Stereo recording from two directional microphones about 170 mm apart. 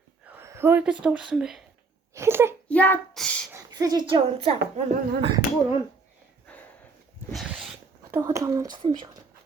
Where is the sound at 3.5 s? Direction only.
20° right (ahead or behind); by 5.3 s 40° right (ahead or behind).